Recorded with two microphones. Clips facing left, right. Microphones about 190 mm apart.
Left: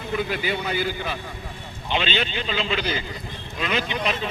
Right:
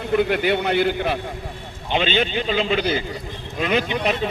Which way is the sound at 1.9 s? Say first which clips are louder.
Right 4 dB; 50° right (ahead or behind).